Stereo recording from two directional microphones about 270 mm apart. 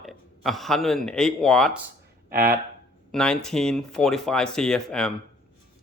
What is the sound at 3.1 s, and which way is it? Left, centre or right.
Speech, centre.